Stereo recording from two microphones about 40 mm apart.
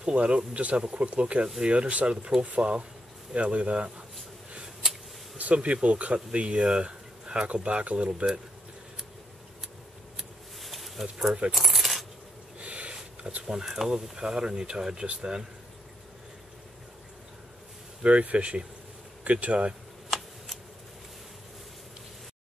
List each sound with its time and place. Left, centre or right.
0.0 s speech: right
5.4 s speech: right
10.1 s a sound: centre
11.5 s coin: centre
12.5 s a sound: right
13.5 s speech: centre
14.1 s speech: centre
18.0 s speech: right
20.1 s a sound: centre